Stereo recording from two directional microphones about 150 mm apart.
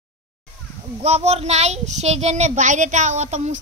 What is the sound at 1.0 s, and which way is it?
A child's voice, 45° right (ahead or behind).